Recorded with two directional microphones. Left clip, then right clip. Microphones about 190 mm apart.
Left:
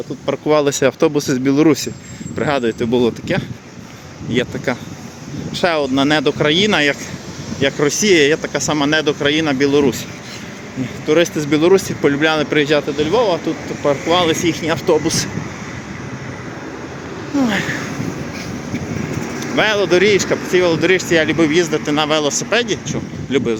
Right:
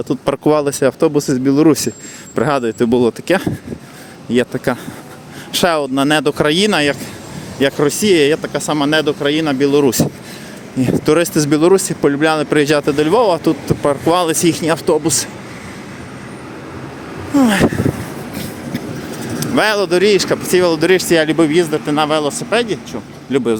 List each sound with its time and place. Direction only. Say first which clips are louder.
0.1 s speech: right 8 dB; 60° right (ahead or behind)
0.4 s speech: even; 25° right (ahead or behind)
0.8 s speech: right 1 dB; 10° right (ahead or behind)
2.3 s speech: right 2 dB; 25° right (ahead or behind)
7.6 s speech: right 1 dB; 20° right (ahead or behind)
9.8 s speech: right 3 dB; 35° right (ahead or behind)
11.3 s speech: right 2 dB; 30° right (ahead or behind)
13.1 s speech: right 3 dB; 50° right (ahead or behind); by 15.3 s 20° right (ahead or behind)
17.3 s speech: right 5 dB; 35° right (ahead or behind)
19.4 s speech: right 1 dB; 30° right (ahead or behind); by 23.4 s 5° right (ahead or behind)